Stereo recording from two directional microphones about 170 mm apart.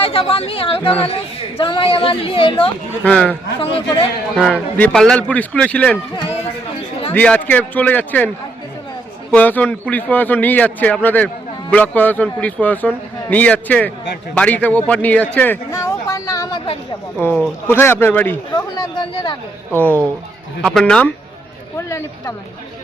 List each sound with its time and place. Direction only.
0.0 s speech: 35° left (ahead or behind)
3.0 s a man's voice: 10° left (ahead or behind)
3.6 s speech: 30° left (ahead or behind)
4.4 s a man's voice: 5° left (ahead or behind)
7.1 s a man's voice: 10° left (ahead or behind)
9.3 s a man's voice: 10° left (ahead or behind)
17.7 s a man's voice: 15° left (ahead or behind)
18.5 s speech: 25° left (ahead or behind)
19.7 s a man's voice: 10° left (ahead or behind)
21.8 s a man's voice: 15° left (ahead or behind)